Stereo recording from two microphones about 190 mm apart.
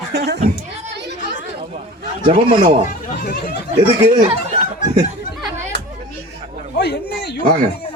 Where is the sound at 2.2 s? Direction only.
30° right (ahead or behind).